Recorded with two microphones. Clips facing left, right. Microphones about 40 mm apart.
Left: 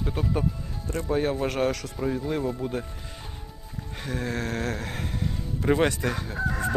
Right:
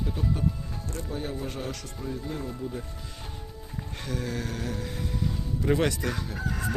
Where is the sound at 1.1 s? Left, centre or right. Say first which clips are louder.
Left 10 dB; left.